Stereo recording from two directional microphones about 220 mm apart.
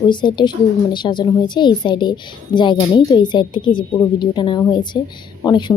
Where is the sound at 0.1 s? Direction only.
20° left (ahead or behind).